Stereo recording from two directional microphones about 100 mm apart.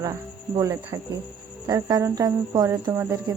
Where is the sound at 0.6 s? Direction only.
30° right (ahead or behind).